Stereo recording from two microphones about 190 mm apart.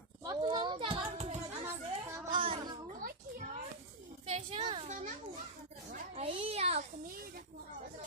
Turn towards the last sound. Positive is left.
turn(degrees=-50)  # may be behind; listen again after turning